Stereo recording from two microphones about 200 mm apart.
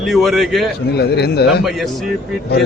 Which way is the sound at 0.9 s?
55° left (ahead or behind).